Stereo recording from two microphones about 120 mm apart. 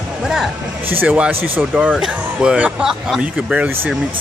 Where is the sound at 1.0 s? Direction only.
10° right (ahead or behind).